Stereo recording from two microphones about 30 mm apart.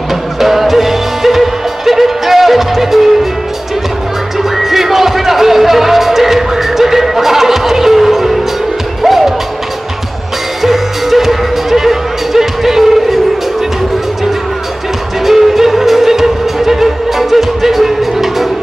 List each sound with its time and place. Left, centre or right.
0.1 s music: centre
4.4 s music: centre
10.6 s music: centre
15.2 s music: centre